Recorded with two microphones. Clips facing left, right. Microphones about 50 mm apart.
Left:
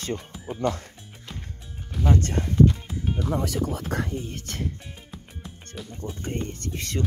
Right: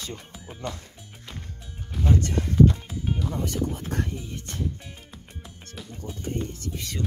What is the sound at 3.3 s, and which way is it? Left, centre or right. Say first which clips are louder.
Speech: left 2 dB; left.